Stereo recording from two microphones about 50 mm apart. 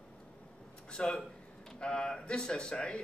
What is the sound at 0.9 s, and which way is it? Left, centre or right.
Speech, centre.